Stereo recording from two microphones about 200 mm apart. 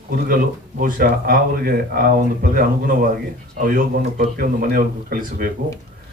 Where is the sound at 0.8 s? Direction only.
45° right (ahead or behind).